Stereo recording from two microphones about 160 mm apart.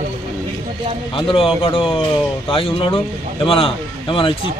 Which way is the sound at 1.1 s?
35° left (ahead or behind).